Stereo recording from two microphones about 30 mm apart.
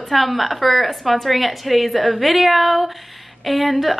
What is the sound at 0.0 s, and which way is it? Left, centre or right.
A woman's voice, centre.